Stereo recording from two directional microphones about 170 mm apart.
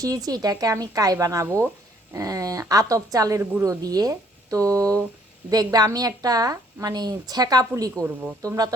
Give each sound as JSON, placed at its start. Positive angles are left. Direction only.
{"t": 0.0, "sound": "a woman's voice", "side_deg": -20}
{"t": 8.0, "sound": "speech", "side_deg": -5}
{"t": 8.4, "sound": "a woman's voice", "side_deg": -20}